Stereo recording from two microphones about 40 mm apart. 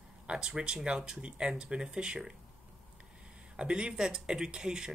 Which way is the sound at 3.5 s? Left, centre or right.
Right.